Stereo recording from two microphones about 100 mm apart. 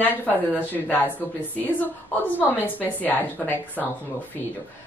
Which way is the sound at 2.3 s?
15° left (ahead or behind).